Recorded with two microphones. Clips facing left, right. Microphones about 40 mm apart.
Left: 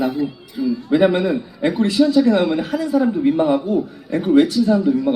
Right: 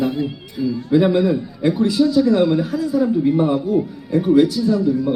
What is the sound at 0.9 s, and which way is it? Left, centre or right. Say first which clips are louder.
A man's voice: right 1 dB; left.